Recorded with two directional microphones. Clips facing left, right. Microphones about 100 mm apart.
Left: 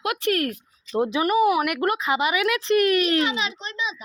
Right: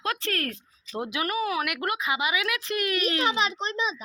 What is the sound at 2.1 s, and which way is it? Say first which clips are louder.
Speech: left 5 dB; 40° left (ahead or behind).